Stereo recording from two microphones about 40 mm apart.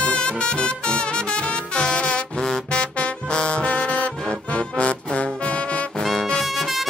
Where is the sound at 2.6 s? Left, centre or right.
Left.